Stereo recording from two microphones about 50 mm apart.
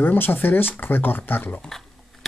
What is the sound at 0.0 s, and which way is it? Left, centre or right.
Speech, left.